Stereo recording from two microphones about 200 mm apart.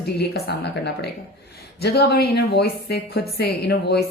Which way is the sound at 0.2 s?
55° left (ahead or behind).